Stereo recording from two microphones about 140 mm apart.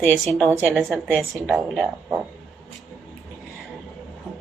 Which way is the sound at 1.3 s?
Centre (ahead or behind).